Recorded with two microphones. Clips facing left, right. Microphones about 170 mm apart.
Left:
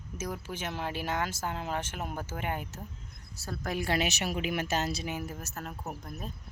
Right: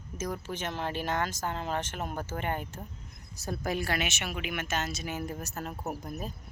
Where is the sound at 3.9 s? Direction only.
35° left (ahead or behind).